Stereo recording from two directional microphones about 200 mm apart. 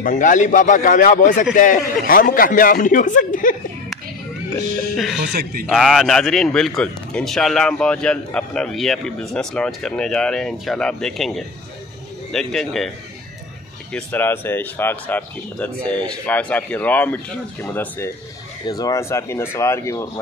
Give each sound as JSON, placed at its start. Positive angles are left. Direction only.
{"t": 0.0, "sound": "a man's voice", "side_deg": 40}
{"t": 5.3, "sound": "speech", "side_deg": -50}
{"t": 5.7, "sound": "a man's voice", "side_deg": 0}
{"t": 13.9, "sound": "speech", "side_deg": 10}